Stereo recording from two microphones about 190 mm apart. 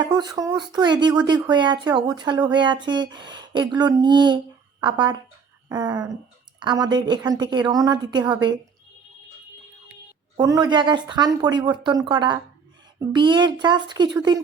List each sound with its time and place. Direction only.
0.0 s speech: 20° right (ahead or behind)
9.9 s speech: 20° right (ahead or behind)